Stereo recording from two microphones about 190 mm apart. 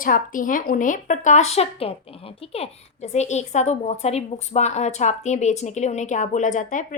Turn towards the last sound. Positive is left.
turn(degrees=40)  # may be behind; listen again after turning